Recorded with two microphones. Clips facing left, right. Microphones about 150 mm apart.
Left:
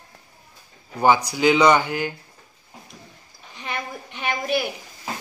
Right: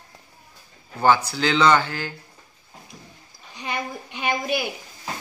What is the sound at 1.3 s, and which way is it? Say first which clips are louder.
Speech: left 3 dB; 15° left (ahead or behind).